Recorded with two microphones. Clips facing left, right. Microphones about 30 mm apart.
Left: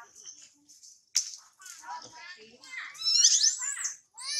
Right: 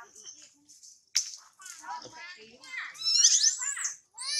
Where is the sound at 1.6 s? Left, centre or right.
Centre.